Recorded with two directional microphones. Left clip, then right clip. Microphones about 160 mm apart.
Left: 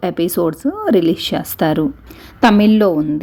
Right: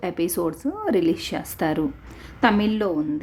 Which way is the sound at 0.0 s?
25° left (ahead or behind).